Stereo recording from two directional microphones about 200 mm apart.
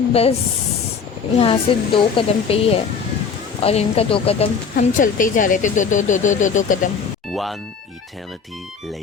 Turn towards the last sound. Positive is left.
turn(degrees=0)  # may be behind; listen again after turning